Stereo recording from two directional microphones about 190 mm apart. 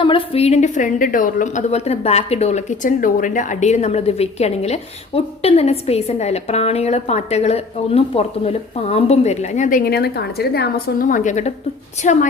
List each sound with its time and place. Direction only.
0.0 s a woman's voice: 30° left (ahead or behind)